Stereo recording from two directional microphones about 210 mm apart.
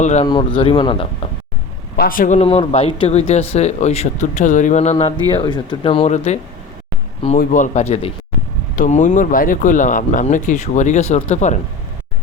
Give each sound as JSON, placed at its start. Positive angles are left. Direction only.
{"t": 0.0, "sound": "speech", "side_deg": 35}
{"t": 0.3, "sound": "speech", "side_deg": 25}
{"t": 2.0, "sound": "speech", "side_deg": 40}